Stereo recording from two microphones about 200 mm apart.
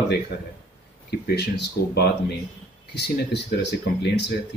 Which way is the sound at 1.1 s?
55° left (ahead or behind).